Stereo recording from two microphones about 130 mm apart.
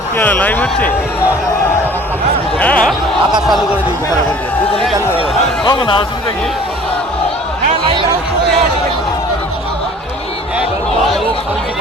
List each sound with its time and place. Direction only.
0.2 s speech: 10° left (ahead or behind)
2.6 s speech: 10° left (ahead or behind)
5.6 s a man's voice: 40° left (ahead or behind)
10.6 s a sound: centre (ahead or behind)